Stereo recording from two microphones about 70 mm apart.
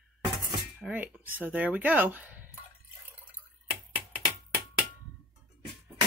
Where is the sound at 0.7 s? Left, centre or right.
Right.